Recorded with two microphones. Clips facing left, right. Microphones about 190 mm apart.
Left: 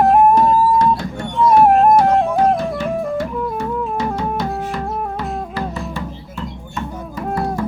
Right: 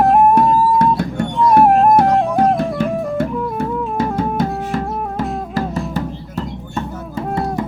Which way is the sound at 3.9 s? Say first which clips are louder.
Right 3 dB; 50° right (ahead or behind).